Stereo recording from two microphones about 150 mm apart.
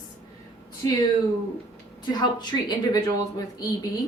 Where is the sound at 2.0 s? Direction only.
30° left (ahead or behind).